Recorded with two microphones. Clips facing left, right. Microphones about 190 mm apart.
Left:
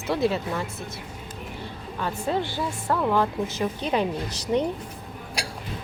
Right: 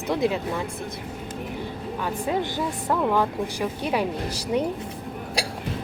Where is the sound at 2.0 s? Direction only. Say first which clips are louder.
Even; 15° right (ahead or behind).